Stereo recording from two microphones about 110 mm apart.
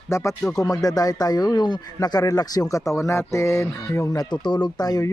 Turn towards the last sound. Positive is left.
turn(degrees=35)  # may be behind; listen again after turning